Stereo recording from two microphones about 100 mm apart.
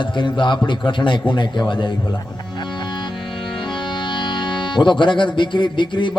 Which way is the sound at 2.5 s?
50° left (ahead or behind).